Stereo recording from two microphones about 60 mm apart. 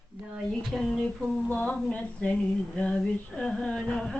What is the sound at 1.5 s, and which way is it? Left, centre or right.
Speech, left.